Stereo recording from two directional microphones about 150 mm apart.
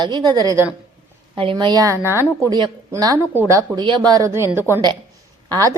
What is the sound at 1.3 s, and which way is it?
A woman's voice, 35° right (ahead or behind).